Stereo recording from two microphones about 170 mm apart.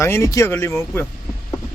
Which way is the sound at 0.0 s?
15° left (ahead or behind).